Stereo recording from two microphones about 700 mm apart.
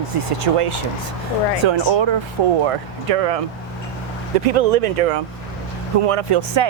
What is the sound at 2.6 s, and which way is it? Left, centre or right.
Speech, right.